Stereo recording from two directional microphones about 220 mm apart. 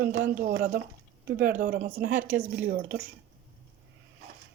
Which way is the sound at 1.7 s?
50° right (ahead or behind).